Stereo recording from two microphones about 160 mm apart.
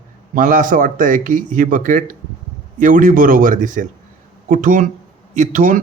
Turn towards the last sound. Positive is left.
turn(degrees=-55)  # may be behind; listen again after turning